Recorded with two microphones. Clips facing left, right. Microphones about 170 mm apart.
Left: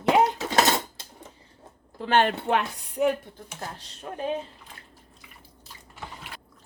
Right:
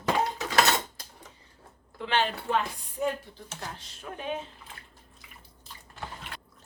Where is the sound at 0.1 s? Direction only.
75° left (ahead or behind).